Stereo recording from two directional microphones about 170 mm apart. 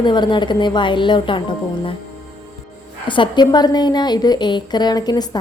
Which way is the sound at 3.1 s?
25° left (ahead or behind).